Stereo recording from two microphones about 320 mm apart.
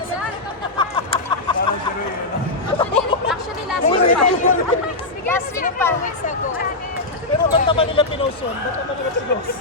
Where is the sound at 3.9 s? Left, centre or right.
Centre.